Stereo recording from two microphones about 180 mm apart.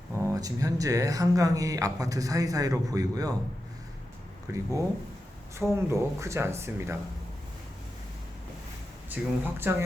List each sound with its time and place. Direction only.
0.2 s speech: 15° right (ahead or behind)
4.5 s speech: 20° right (ahead or behind)
9.0 s speech: 10° right (ahead or behind)